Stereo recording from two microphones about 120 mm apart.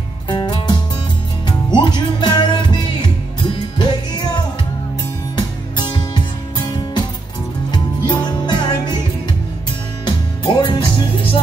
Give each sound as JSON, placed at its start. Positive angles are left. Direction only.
{"t": 0.3, "sound": "music", "side_deg": 40}
{"t": 5.3, "sound": "music", "side_deg": 40}
{"t": 10.0, "sound": "music", "side_deg": 40}